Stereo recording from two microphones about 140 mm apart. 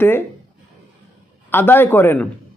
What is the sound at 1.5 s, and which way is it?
Speech, 15° left (ahead or behind).